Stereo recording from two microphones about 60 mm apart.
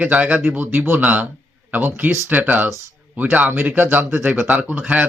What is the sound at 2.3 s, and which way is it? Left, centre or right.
Speech, right.